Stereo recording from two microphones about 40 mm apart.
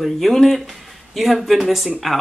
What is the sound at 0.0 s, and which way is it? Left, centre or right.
Speech, centre.